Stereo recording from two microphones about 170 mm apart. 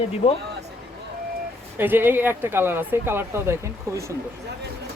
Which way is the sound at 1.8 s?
10° right (ahead or behind).